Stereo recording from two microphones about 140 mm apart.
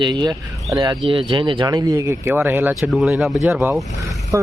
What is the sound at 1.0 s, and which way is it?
Speech, 40° right (ahead or behind).